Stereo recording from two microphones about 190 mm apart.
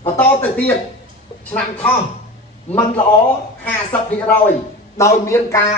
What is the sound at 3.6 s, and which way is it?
Speech, 10° left (ahead or behind).